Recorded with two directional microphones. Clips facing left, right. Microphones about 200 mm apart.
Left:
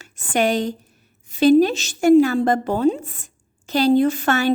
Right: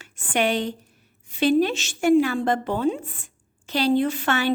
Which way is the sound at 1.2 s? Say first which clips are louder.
Left 6 dB; 40° left (ahead or behind).